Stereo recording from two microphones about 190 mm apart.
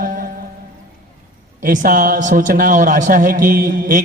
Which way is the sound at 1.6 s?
45° right (ahead or behind).